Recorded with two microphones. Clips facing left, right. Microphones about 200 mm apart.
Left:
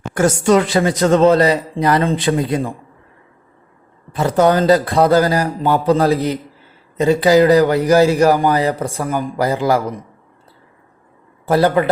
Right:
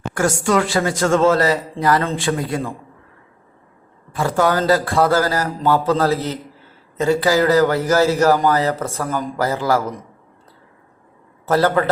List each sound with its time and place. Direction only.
0.1 s speech: 20° left (ahead or behind)
4.1 s a man's voice: 20° left (ahead or behind)
11.4 s a man's voice: 15° left (ahead or behind)